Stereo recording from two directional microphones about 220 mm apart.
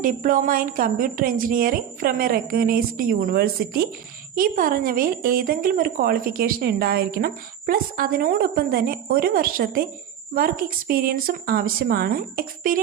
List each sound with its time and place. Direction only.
0.0 s a woman's voice: 40° right (ahead or behind)